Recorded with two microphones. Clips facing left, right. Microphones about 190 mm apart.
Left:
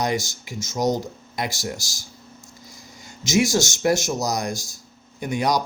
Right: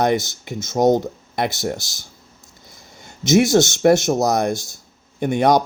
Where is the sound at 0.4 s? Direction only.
60° right (ahead or behind).